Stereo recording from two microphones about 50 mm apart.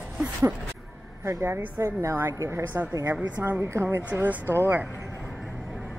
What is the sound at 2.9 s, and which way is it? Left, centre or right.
Speech, right.